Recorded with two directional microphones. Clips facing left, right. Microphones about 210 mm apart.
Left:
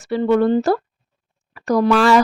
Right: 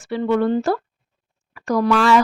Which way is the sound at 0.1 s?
40° left (ahead or behind).